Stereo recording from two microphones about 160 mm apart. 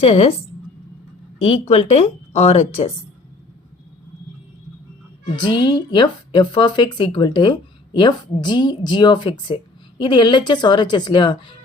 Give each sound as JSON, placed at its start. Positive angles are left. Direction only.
{"t": 0.0, "sound": "a woman's voice", "side_deg": 40}
{"t": 1.5, "sound": "a woman's voice", "side_deg": 40}
{"t": 5.2, "sound": "a woman's voice", "side_deg": 30}